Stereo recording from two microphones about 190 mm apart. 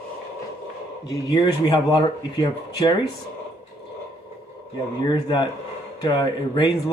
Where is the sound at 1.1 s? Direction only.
20° left (ahead or behind).